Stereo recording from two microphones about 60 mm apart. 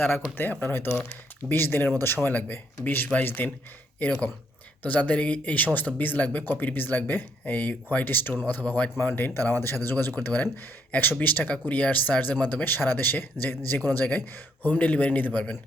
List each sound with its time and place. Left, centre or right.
0.0 s speech: left
4.8 s speech: left
8.6 s speech: left
9.0 s speech: left